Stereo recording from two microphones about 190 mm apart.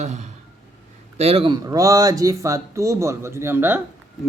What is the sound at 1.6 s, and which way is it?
Speech, 20° right (ahead or behind).